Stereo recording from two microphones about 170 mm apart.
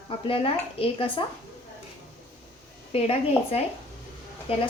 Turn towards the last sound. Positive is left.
turn(degrees=35)  # may be behind; listen again after turning